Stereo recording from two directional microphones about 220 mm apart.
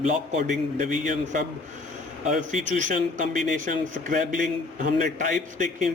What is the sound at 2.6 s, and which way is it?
Speech, 35° right (ahead or behind).